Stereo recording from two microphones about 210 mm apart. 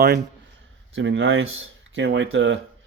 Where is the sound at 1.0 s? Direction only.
60° right (ahead or behind).